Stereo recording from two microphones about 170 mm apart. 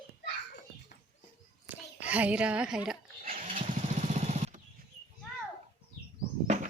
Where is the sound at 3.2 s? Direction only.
55° right (ahead or behind).